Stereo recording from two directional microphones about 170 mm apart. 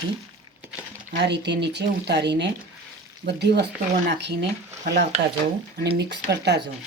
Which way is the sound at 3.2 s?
75° right (ahead or behind).